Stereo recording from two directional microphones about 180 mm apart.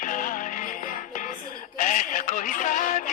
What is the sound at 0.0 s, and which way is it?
Music, 45° left (ahead or behind).